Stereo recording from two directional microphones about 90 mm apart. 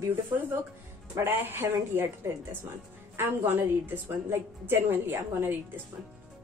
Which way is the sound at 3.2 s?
25° right (ahead or behind).